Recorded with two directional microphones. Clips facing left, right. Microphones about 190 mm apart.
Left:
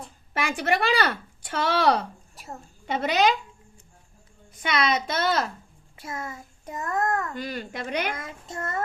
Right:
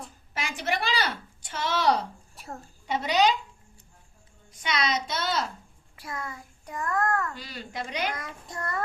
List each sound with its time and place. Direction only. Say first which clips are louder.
0.3 s speech: left 5 dB; 60° left (ahead or behind)
2.3 s a sound: right 1 dB; centre (ahead or behind)
2.8 s a child's voice: left 1 dB; 60° left (ahead or behind)
4.6 s a child's voice: left 4 dB; 55° left (ahead or behind)
6.0 s a child's voice: left 2 dB; 25° left (ahead or behind)
7.3 s a woman's voice: left 5 dB; 50° left (ahead or behind)
8.1 s a child's voice: left 2 dB; 25° left (ahead or behind)